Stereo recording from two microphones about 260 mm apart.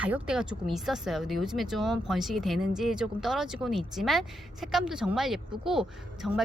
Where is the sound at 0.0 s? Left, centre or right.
Centre.